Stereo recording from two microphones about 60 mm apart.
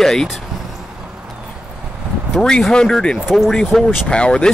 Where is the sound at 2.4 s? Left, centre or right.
Centre.